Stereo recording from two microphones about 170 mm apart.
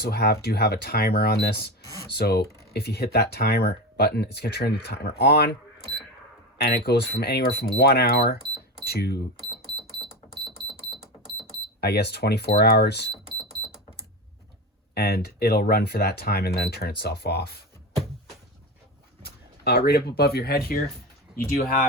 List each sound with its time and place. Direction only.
0.0 s speech: 70° left (ahead or behind)
6.6 s speech: 70° left (ahead or behind)
11.8 s speech: 70° left (ahead or behind)
14.9 s speech: 65° left (ahead or behind)
19.2 s speech: 65° left (ahead or behind)